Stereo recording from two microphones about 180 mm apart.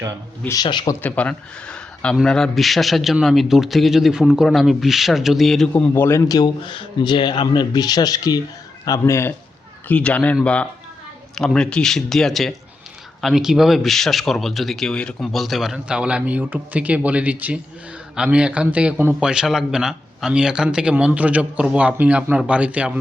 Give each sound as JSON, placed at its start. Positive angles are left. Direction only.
{"t": 0.4, "sound": "a man's voice", "side_deg": 20}
{"t": 1.0, "sound": "a man's voice", "side_deg": 10}